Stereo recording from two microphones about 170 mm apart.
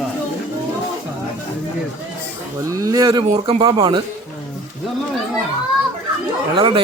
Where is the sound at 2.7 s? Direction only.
20° right (ahead or behind).